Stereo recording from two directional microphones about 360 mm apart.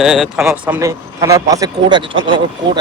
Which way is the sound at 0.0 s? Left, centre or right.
Centre.